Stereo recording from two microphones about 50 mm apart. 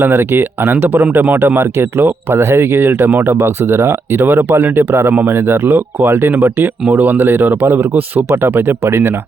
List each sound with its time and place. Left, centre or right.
0.0 s speech: right
1.5 s speech: right